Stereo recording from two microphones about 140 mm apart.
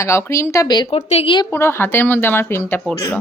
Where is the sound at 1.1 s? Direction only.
45° left (ahead or behind).